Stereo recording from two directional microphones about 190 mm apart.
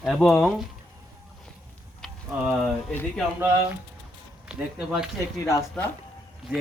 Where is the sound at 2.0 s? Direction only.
Centre (ahead or behind).